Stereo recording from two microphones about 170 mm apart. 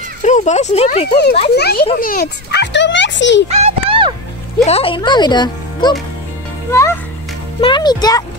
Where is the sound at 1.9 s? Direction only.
55° left (ahead or behind); by 3.4 s 90° left.